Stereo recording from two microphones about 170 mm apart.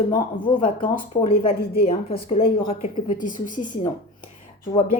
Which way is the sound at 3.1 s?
50° left (ahead or behind).